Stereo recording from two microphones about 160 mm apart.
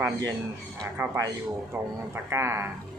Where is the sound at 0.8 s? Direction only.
20° right (ahead or behind).